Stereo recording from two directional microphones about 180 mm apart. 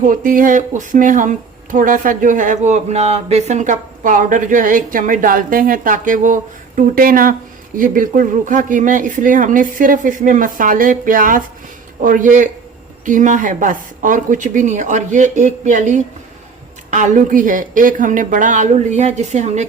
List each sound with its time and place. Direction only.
0.0 s speech: 50° right (ahead or behind)